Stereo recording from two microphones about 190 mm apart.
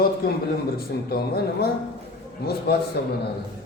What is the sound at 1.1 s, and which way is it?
Speech, 55° left (ahead or behind).